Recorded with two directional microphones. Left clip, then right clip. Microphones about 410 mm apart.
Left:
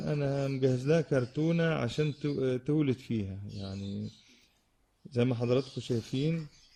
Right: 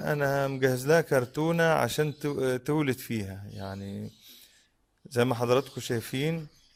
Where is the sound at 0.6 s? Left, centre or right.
Centre.